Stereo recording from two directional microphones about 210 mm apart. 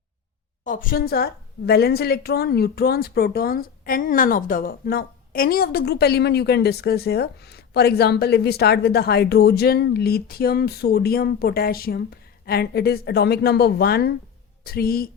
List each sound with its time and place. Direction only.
0.6 s a woman's voice: 40° left (ahead or behind)